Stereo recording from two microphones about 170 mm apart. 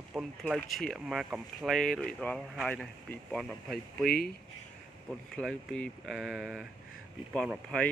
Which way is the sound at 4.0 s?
65° left (ahead or behind).